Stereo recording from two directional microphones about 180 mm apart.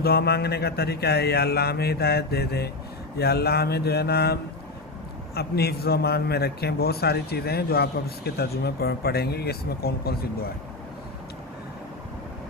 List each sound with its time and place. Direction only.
0.0 s a man's voice: 60° left (ahead or behind)